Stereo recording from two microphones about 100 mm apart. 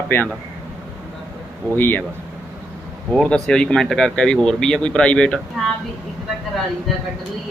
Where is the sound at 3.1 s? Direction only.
5° left (ahead or behind).